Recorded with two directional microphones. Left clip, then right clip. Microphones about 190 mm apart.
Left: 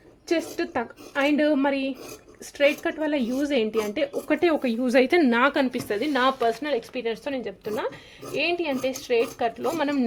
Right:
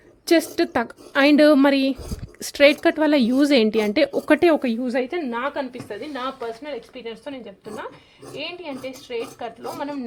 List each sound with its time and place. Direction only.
0.3 s a woman's voice: 40° right (ahead or behind)
5.1 s a woman's voice: 50° left (ahead or behind); by 10.1 s 65° left (ahead or behind)